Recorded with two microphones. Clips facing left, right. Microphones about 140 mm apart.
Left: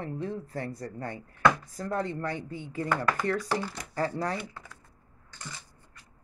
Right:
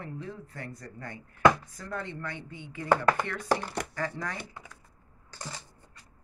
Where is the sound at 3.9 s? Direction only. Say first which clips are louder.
Left 5 dB; 35° left (ahead or behind).